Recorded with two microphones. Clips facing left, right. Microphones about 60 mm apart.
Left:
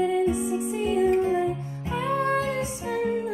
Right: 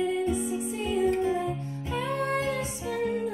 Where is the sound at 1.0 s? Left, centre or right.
Left.